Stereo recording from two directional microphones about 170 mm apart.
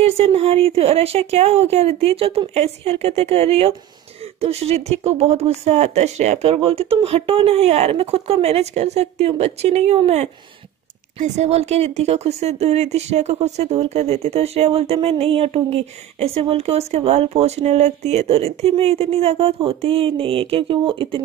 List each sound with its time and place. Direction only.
0.0 s speech: 35° right (ahead or behind)